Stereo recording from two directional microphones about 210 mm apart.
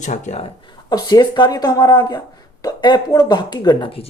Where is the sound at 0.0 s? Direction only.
35° left (ahead or behind).